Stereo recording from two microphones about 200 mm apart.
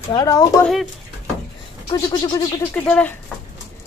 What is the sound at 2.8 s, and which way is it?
Speech, 10° left (ahead or behind).